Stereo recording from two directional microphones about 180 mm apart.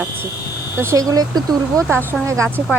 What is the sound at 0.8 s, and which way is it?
Speech, 15° right (ahead or behind).